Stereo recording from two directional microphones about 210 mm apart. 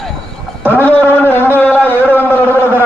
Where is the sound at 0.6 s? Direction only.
10° left (ahead or behind).